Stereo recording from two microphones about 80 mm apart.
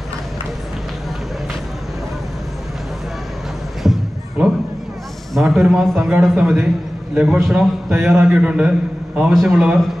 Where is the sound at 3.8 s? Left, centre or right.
Centre.